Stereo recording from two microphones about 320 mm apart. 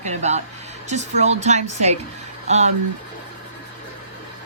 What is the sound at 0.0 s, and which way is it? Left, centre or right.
Speech, right.